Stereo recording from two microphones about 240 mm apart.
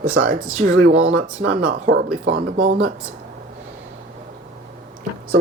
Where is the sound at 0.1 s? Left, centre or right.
Right.